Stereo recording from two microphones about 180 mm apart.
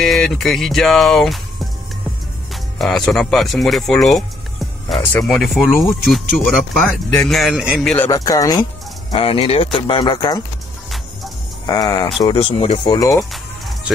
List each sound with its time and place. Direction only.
0.0 s speech: centre (ahead or behind)
7.9 s speech: 10° left (ahead or behind)
9.1 s speech: 30° left (ahead or behind)
11.6 s speech: 20° left (ahead or behind)
13.3 s music: centre (ahead or behind)